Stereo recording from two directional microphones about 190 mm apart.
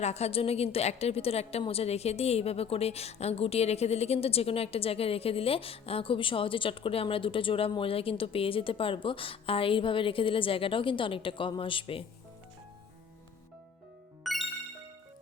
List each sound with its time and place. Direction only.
0.0 s a woman's voice: 35° left (ahead or behind)
14.3 s music: centre (ahead or behind)